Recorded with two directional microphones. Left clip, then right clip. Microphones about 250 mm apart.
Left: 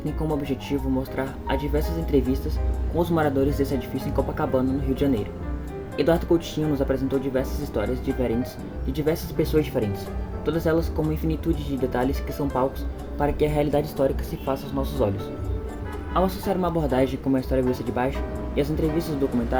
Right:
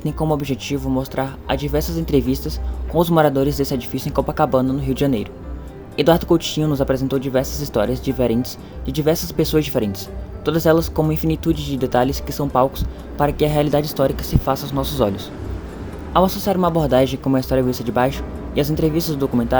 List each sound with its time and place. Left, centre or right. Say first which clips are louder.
0.0 s speech: right 6 dB; right
16.1 s speech: right 7 dB; right